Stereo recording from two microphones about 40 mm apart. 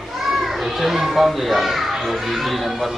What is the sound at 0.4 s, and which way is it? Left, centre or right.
A child's voice, centre.